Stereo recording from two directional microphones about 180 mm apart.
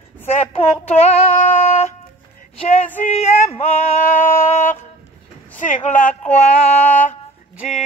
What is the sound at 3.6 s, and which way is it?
Music, 35° left (ahead or behind).